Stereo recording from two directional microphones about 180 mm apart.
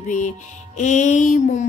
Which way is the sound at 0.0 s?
45° left (ahead or behind).